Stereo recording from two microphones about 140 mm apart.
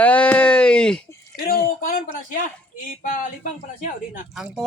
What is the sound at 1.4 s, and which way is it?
Speech, 85° left.